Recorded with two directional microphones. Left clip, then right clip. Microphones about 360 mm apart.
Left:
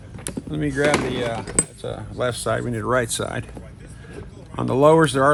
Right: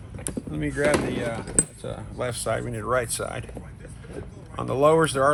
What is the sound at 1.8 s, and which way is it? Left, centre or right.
Speech, left.